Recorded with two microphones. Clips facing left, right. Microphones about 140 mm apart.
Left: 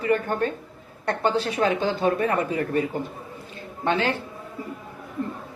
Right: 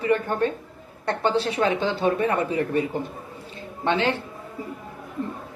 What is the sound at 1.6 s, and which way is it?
Speech, 35° left (ahead or behind).